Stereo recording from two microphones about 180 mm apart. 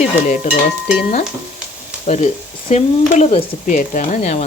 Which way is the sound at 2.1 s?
40° left (ahead or behind).